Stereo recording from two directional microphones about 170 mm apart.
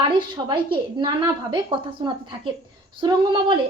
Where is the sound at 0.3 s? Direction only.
30° right (ahead or behind).